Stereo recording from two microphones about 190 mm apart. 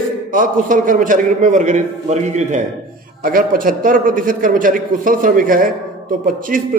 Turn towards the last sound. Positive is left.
turn(degrees=-45)  # may be behind; listen again after turning